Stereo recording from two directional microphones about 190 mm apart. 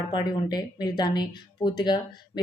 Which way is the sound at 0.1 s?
20° left (ahead or behind).